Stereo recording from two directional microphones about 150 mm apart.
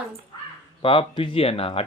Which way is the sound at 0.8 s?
35° left (ahead or behind).